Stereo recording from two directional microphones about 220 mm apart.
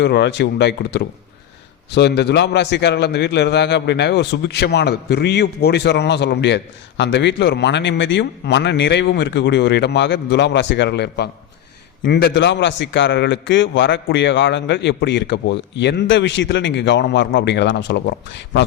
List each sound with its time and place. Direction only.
0.0 s a man's voice: 50° left (ahead or behind)